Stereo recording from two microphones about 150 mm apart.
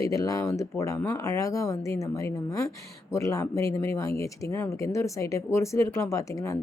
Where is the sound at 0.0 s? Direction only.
25° left (ahead or behind).